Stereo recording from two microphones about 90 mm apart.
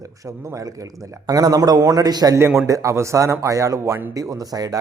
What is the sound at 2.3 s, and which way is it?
A man's voice, 30° right (ahead or behind).